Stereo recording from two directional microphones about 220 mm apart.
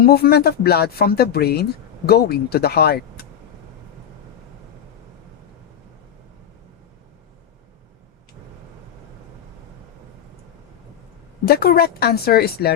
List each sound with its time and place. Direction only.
0.0 s speech: 45° left (ahead or behind)
11.4 s speech: 45° left (ahead or behind)